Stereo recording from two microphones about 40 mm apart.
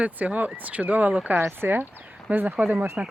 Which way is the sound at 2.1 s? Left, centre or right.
Right.